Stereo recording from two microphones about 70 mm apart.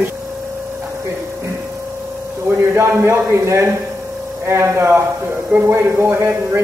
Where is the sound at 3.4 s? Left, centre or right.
Right.